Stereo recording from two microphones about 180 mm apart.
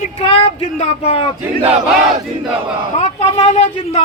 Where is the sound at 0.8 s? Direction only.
35° left (ahead or behind).